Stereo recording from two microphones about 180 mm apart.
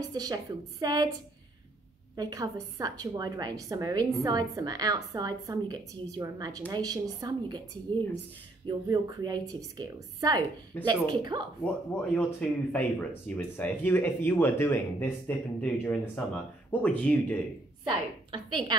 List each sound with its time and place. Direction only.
0.0 s a woman's voice: 20° right (ahead or behind)
2.1 s a woman's voice: 20° right (ahead or behind)
8.6 s a woman's voice: 20° right (ahead or behind)
11.6 s speech: 5° left (ahead or behind)
17.8 s a woman's voice: 25° right (ahead or behind)